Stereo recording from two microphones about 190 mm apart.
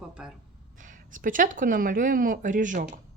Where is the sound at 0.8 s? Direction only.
45° right (ahead or behind).